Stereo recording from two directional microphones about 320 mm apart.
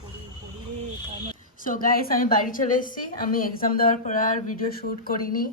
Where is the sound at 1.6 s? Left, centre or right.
Left.